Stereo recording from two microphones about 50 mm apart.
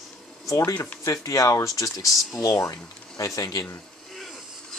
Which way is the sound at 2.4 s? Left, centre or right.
Left.